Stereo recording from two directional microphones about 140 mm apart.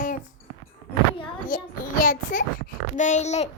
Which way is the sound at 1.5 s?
70° left (ahead or behind).